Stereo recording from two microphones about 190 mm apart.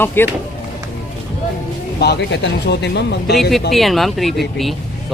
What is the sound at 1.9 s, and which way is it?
Speech, 60° left (ahead or behind).